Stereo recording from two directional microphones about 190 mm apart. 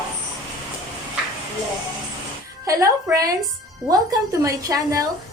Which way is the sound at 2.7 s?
20° right (ahead or behind).